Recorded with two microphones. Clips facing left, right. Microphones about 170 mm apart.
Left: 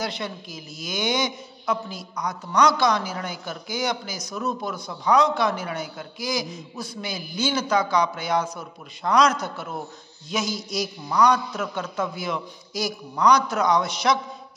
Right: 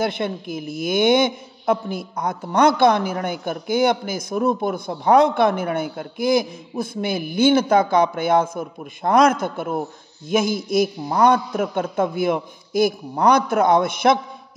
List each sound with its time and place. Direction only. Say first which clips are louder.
0.0 s a man's voice: right 7 dB; 55° right (ahead or behind)